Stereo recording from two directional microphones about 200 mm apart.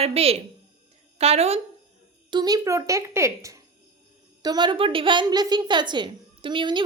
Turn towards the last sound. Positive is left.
turn(degrees=-25)  # may be behind; listen again after turning